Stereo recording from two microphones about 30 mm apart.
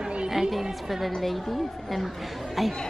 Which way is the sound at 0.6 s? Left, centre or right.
Centre.